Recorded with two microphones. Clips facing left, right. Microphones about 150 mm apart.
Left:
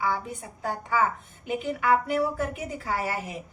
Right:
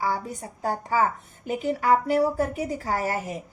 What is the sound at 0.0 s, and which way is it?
A woman's voice, 40° right (ahead or behind).